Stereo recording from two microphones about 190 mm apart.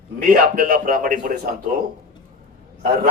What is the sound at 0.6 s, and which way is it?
Speech, 50° right (ahead or behind).